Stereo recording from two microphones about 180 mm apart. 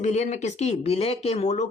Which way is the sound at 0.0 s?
40° left (ahead or behind).